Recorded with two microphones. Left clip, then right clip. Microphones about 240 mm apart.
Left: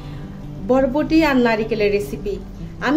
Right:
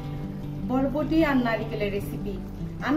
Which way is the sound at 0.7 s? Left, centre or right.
Left.